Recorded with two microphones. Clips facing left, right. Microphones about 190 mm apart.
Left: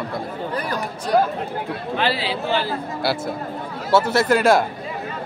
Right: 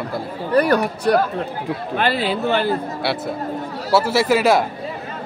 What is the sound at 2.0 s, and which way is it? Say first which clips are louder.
Speech: right 4 dB; 50° right (ahead or behind).